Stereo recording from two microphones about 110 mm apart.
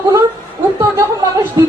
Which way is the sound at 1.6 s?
30° right (ahead or behind).